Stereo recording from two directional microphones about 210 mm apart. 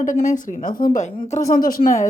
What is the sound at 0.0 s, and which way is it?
Speech, 35° left (ahead or behind).